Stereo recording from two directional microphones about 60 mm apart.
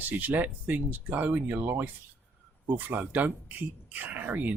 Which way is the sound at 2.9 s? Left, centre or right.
Right.